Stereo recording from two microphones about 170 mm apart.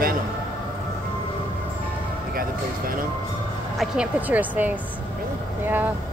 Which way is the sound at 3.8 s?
10° right (ahead or behind).